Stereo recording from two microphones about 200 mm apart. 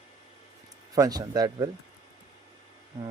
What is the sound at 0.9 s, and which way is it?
Speech, 15° right (ahead or behind).